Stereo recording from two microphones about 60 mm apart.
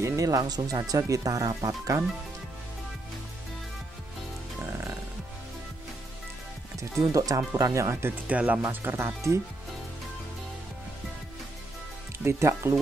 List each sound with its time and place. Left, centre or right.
0.0 s speech: right
1.6 s speech: right
6.8 s speech: right
8.3 s speech: right
8.6 s speech: right
12.3 s speech: right